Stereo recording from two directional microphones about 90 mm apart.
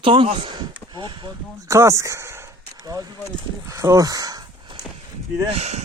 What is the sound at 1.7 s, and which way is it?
Speech, 30° right (ahead or behind).